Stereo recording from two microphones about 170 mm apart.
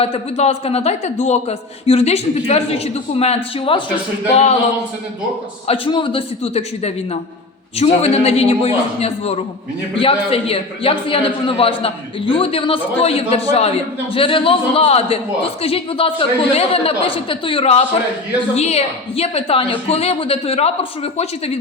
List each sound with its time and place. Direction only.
0.0 s a man's voice: 35° left (ahead or behind)
5.6 s a man's voice: 30° left (ahead or behind)